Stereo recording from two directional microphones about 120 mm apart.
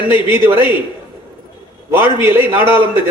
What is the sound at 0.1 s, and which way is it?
Speech, 20° right (ahead or behind).